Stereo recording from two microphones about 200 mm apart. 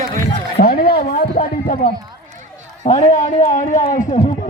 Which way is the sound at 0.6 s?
50° left (ahead or behind).